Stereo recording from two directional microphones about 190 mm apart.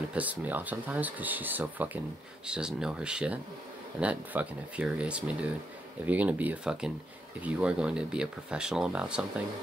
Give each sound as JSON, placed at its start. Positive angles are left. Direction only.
{"t": 0.1, "sound": "speech", "side_deg": -10}